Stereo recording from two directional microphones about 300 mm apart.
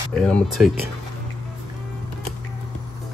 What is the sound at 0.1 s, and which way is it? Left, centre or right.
Speech, centre.